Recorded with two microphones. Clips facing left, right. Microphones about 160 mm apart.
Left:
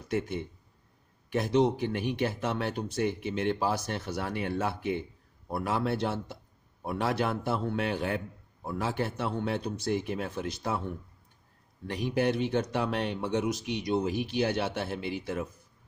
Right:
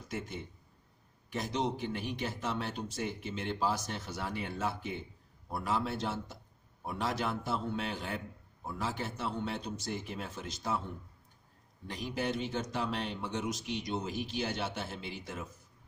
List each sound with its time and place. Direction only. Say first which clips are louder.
1.3 s speech: left 9 dB; 60° left (ahead or behind)
11.9 s speech: left 7 dB; 65° left (ahead or behind)